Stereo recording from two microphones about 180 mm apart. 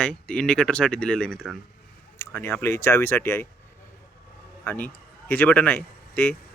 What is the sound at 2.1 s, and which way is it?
Speech, 15° left (ahead or behind).